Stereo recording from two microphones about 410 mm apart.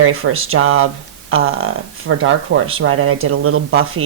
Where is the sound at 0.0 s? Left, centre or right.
Right.